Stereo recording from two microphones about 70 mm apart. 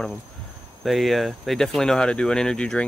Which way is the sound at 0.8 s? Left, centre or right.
Centre.